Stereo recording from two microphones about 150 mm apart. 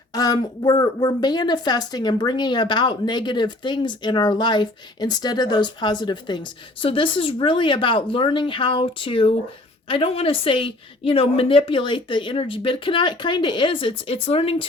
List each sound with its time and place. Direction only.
0.1 s a woman's voice: 25° left (ahead or behind)